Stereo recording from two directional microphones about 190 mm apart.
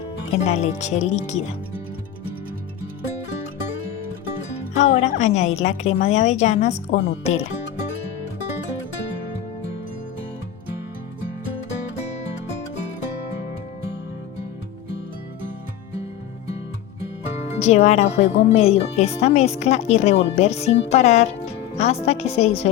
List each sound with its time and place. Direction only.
0.3 s speech: 35° left (ahead or behind)
4.7 s speech: 35° left (ahead or behind)
6.9 s speech: 70° left (ahead or behind)
17.6 s speech: 35° left (ahead or behind)